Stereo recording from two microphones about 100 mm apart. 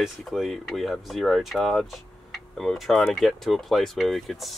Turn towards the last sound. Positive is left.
turn(degrees=0)  # may be behind; listen again after turning